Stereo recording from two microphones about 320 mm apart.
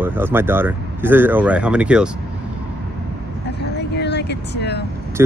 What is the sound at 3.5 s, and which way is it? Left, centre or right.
Vehicle, left.